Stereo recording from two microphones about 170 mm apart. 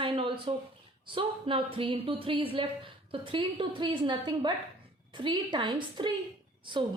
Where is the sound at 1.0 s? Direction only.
30° right (ahead or behind).